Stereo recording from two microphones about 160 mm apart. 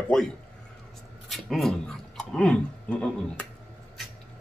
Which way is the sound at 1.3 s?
Centre (ahead or behind).